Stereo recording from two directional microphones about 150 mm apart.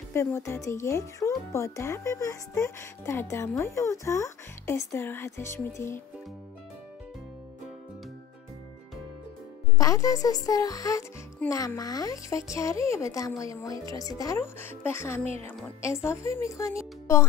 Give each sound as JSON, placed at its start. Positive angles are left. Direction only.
{"t": 0.1, "sound": "speech", "side_deg": 15}
{"t": 9.8, "sound": "speech", "side_deg": 25}